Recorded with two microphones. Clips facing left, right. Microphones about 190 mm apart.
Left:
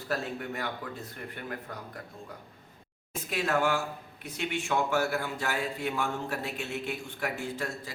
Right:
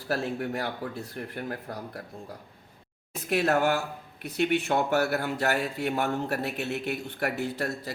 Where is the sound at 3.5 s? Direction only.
40° right (ahead or behind).